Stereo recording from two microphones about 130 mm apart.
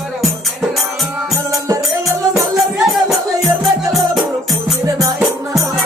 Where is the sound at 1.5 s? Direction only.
25° right (ahead or behind).